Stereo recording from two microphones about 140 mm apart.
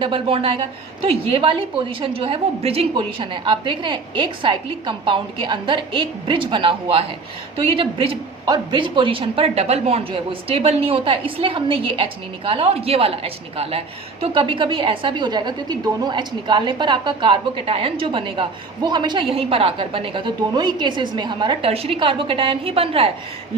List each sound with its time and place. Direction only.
0.0 s a woman's voice: 40° right (ahead or behind)